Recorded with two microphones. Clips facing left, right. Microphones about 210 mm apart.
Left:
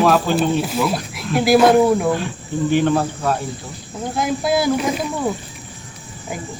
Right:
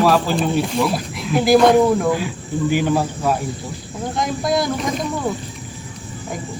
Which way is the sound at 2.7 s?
10° right (ahead or behind).